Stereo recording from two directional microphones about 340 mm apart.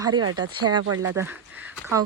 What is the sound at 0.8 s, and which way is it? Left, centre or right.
Speech, right.